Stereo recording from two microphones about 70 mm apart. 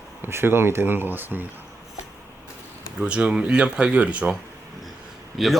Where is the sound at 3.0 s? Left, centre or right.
Centre.